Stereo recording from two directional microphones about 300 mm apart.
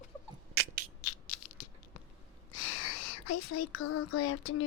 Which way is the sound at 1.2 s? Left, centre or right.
Left.